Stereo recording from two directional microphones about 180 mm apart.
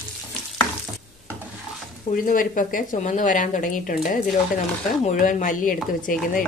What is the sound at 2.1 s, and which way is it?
Speech, 50° left (ahead or behind).